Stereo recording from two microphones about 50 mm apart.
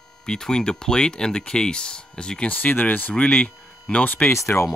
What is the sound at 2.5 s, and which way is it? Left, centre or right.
Speech, left.